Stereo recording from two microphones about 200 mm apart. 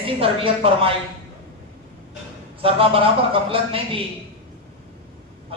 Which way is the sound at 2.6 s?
25° right (ahead or behind).